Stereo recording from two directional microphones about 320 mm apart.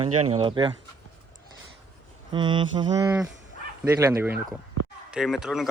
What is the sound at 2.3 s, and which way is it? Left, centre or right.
A man's voice, centre.